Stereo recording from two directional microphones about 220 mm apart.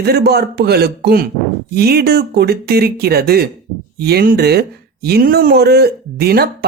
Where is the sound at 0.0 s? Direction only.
45° right (ahead or behind).